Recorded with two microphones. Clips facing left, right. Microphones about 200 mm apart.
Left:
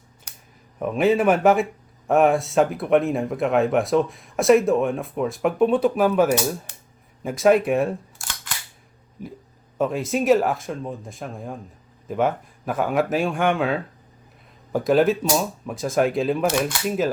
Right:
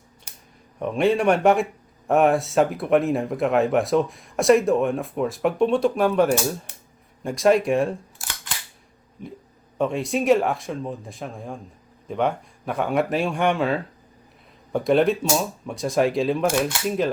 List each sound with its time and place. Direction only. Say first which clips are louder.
0.8 s speech: left 1 dB; 5° left (ahead or behind)
9.2 s speech: left 1 dB; 5° left (ahead or behind)